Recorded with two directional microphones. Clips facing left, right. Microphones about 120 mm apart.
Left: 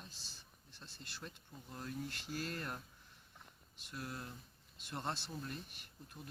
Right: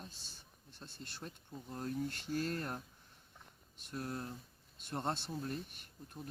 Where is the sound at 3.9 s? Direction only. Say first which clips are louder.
Right 5 dB; 35° right (ahead or behind).